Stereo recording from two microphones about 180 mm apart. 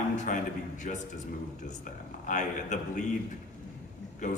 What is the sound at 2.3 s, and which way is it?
Speech, 40° left (ahead or behind).